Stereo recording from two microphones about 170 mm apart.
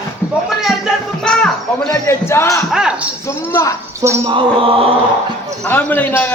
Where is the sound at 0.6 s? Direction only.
Centre (ahead or behind).